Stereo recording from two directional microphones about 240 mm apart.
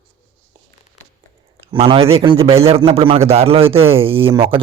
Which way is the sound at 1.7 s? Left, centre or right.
Right.